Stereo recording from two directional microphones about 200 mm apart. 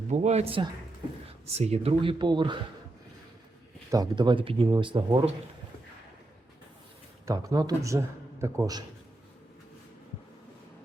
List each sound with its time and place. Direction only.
0.1 s speech: 35° right (ahead or behind)
3.9 s speech: 20° right (ahead or behind)
7.3 s a man's voice: 15° right (ahead or behind)